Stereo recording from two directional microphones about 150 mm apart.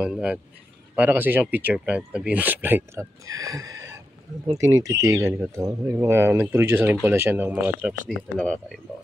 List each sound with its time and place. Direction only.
0.0 s speech: 5° right (ahead or behind)
8.4 s speech: 5° left (ahead or behind)